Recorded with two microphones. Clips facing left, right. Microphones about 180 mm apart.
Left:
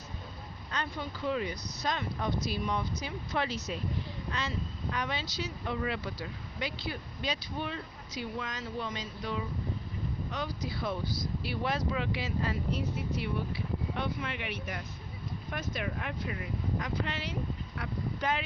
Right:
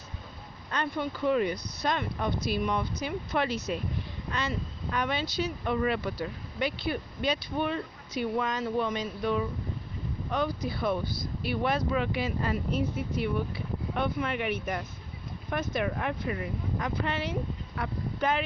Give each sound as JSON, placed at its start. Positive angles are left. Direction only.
{"t": 0.7, "sound": "speech", "side_deg": -60}
{"t": 4.9, "sound": "speech", "side_deg": -60}